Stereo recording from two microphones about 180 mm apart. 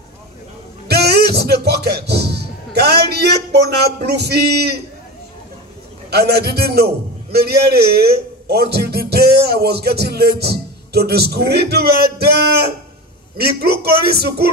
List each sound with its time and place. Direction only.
0.8 s music: 65° right (ahead or behind)
3.8 s a man's voice: 65° right (ahead or behind)
6.0 s a man's voice: 60° right (ahead or behind)